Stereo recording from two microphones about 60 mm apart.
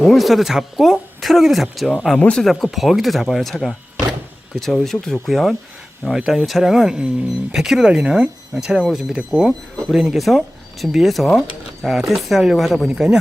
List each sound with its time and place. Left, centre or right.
0.0 s speech: centre
2.1 s speech: left
2.4 s speech: centre
12.9 s speech: centre